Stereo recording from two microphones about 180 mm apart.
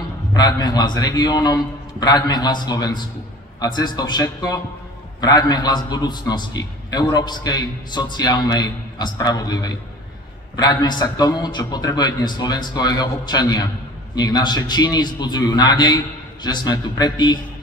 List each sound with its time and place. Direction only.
0.3 s a man's voice: 20° left (ahead or behind)